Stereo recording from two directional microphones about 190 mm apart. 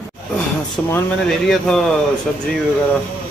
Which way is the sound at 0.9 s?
5° left (ahead or behind).